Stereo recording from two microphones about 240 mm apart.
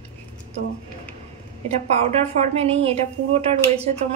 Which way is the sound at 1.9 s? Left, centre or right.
Right.